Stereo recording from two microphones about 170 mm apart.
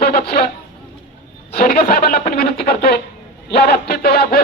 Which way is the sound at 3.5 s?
65° left (ahead or behind).